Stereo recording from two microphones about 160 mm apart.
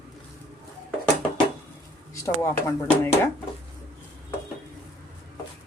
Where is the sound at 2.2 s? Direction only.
20° left (ahead or behind).